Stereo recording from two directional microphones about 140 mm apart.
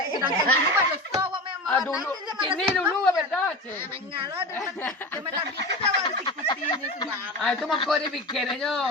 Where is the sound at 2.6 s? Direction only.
5° left (ahead or behind).